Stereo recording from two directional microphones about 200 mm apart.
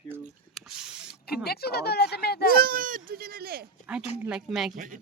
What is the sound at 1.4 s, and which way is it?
Speech, 50° left (ahead or behind).